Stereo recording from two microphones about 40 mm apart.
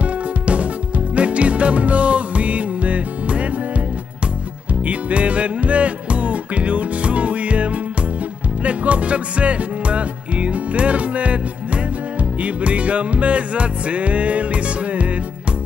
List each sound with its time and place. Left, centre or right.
0.0 s music: right
4.8 s music: right